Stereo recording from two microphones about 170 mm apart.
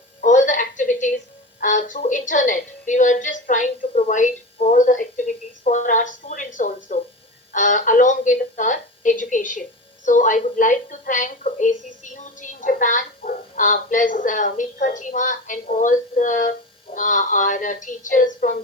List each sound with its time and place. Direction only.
0.2 s music: 50° left (ahead or behind)
1.6 s a woman's voice: 50° left (ahead or behind)